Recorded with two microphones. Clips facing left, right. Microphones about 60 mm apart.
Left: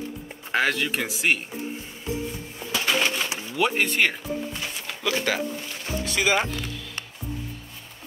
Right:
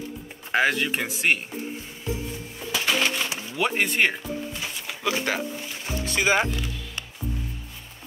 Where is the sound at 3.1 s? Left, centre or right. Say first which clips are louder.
Even; centre.